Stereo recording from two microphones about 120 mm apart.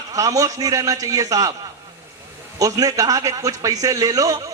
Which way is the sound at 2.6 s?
30° right (ahead or behind).